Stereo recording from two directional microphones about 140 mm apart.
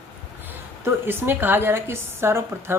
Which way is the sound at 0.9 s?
15° right (ahead or behind).